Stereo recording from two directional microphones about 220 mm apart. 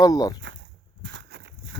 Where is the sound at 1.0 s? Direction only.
50° right (ahead or behind).